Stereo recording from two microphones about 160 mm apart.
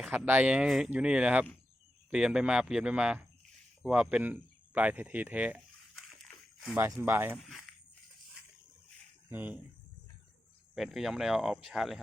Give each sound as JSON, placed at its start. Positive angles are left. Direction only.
{"t": 0.0, "sound": "speech", "side_deg": 0}
{"t": 3.8, "sound": "a sound", "side_deg": -5}
{"t": 7.0, "sound": "speech", "side_deg": -15}
{"t": 9.3, "sound": "speech", "side_deg": -10}
{"t": 10.8, "sound": "speech", "side_deg": 0}